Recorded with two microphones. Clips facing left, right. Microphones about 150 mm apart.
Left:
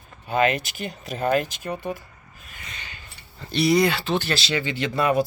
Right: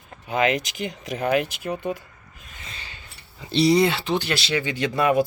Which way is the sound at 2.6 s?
30° right (ahead or behind).